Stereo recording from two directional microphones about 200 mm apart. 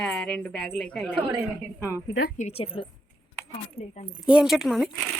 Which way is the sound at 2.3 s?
30° left (ahead or behind).